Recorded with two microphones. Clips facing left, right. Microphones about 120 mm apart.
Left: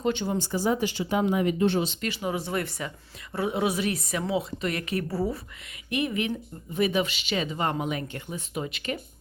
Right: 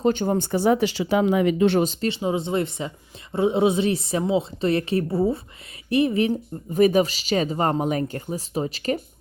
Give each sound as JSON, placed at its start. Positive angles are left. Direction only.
{"t": 0.0, "sound": "speech", "side_deg": -45}
{"t": 1.8, "sound": "speech", "side_deg": -40}
{"t": 2.0, "sound": "a woman's voice", "side_deg": -25}